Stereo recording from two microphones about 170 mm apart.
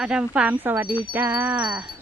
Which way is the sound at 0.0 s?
5° right (ahead or behind).